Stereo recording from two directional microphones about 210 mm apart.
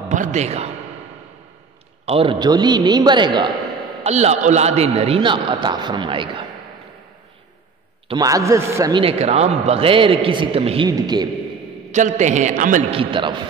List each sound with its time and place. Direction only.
0.1 s a man's voice: 35° right (ahead or behind)
2.0 s a man's voice: 25° right (ahead or behind)
4.0 s a man's voice: 30° right (ahead or behind)
8.1 s a man's voice: 15° right (ahead or behind)
11.9 s a man's voice: 35° right (ahead or behind)
12.9 s a man's voice: 25° right (ahead or behind)